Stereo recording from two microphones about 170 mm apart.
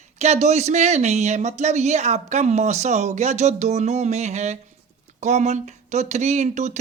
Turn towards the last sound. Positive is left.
turn(degrees=-45)  # may be behind; listen again after turning